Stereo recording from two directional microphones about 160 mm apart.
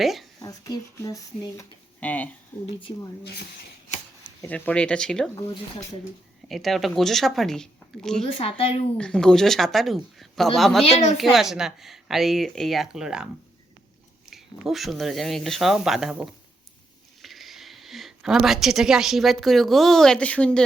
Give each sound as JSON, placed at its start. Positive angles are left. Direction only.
{"t": 0.0, "sound": "speech", "side_deg": 0}
{"t": 0.4, "sound": "speech", "side_deg": 25}
{"t": 2.0, "sound": "speech", "side_deg": 10}
{"t": 3.2, "sound": "speech", "side_deg": 85}
{"t": 4.4, "sound": "speech", "side_deg": 10}
{"t": 6.5, "sound": "speech", "side_deg": 0}
{"t": 8.4, "sound": "speech", "side_deg": 35}
{"t": 9.0, "sound": "speech", "side_deg": 5}
{"t": 10.9, "sound": "a woman's voice", "side_deg": 45}
{"t": 11.2, "sound": "speech", "side_deg": 0}
{"t": 14.3, "sound": "a woman's voice", "side_deg": 0}